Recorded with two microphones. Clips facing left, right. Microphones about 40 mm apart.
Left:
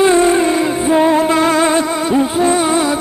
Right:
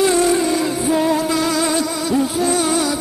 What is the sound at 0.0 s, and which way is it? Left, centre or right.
Music, left.